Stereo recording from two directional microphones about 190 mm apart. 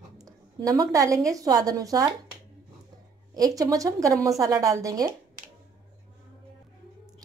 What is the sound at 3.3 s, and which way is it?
A woman's voice, 20° right (ahead or behind).